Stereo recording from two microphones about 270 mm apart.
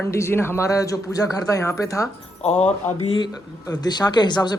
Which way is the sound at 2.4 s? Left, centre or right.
Left.